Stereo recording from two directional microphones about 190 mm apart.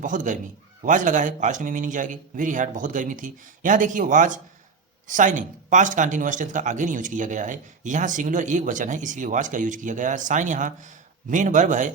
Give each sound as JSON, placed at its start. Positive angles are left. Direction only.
{"t": 0.0, "sound": "a man's voice", "side_deg": -40}